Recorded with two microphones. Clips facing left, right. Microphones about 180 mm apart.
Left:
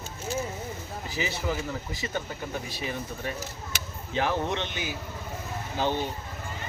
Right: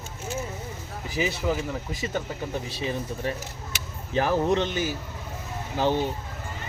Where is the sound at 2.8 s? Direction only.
25° right (ahead or behind).